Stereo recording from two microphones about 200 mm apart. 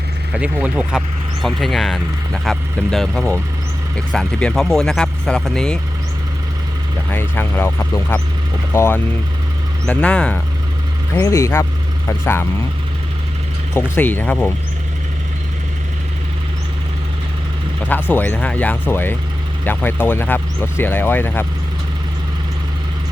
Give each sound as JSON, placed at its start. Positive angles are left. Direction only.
{"t": 0.3, "sound": "speech", "side_deg": -5}
{"t": 7.1, "sound": "speech", "side_deg": 10}
{"t": 11.1, "sound": "speech", "side_deg": 15}
{"t": 13.7, "sound": "speech", "side_deg": 10}
{"t": 17.8, "sound": "speech", "side_deg": 10}